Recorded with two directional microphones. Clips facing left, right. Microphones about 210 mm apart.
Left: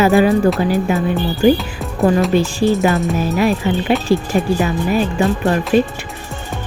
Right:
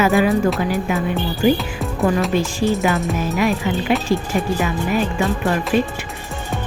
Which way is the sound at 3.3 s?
35° left (ahead or behind).